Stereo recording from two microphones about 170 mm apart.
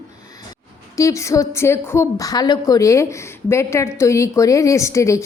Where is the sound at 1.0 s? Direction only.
20° left (ahead or behind).